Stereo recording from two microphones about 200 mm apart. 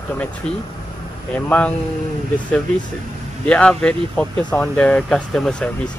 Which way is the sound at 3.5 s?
5° left (ahead or behind).